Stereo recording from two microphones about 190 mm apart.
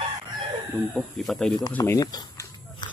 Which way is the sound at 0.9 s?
Centre (ahead or behind).